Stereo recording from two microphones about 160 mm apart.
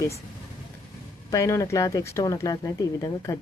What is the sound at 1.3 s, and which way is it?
Speech, 20° left (ahead or behind).